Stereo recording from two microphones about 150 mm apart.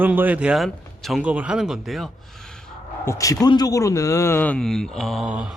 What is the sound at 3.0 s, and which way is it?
A man's voice, 20° left (ahead or behind).